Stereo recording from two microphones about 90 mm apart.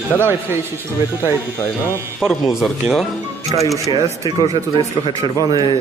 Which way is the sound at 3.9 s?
60° right (ahead or behind).